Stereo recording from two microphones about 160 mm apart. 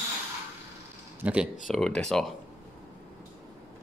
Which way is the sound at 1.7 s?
5° left (ahead or behind).